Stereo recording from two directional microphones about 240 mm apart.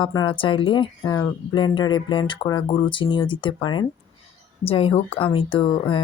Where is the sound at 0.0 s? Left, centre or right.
Centre.